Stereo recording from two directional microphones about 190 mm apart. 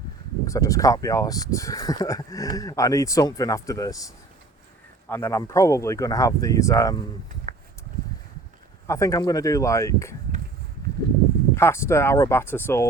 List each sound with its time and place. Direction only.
0.4 s speech: 15° left (ahead or behind)
7.5 s a sound: 45° right (ahead or behind)
8.9 s speech: 15° left (ahead or behind)
11.5 s speech: 15° left (ahead or behind)